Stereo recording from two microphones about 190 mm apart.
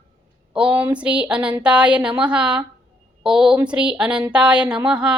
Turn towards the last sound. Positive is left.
turn(degrees=-5)  # may be behind; listen again after turning